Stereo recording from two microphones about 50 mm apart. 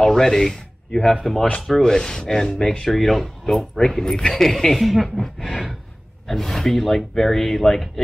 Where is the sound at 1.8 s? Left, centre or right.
Centre.